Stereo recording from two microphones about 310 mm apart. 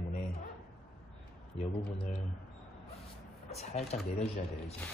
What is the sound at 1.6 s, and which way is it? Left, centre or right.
Speech, left.